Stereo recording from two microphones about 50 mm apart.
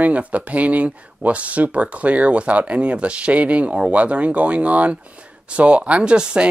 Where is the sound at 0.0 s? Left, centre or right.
Right.